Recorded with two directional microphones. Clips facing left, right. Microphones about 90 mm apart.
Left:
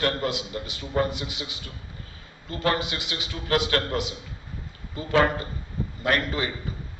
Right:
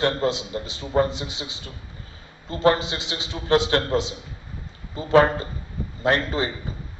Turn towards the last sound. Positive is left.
turn(degrees=-30)  # may be behind; listen again after turning